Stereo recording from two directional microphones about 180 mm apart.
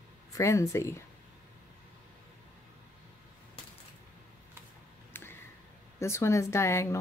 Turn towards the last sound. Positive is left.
turn(degrees=15)  # may be behind; listen again after turning